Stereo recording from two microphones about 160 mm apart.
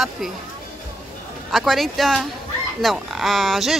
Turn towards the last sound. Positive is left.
turn(degrees=0)  # may be behind; listen again after turning